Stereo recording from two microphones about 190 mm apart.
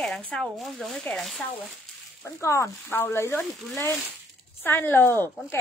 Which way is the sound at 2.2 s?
15° left (ahead or behind).